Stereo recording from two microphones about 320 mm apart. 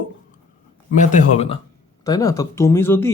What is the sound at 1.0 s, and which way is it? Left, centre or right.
Speech, left.